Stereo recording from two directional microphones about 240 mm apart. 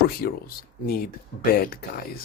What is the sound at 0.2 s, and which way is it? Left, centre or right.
Speech, left.